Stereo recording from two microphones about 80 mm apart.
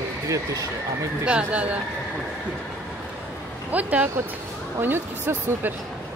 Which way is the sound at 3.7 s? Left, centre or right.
Centre.